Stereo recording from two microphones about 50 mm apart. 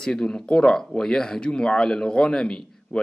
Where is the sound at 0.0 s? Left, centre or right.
Centre.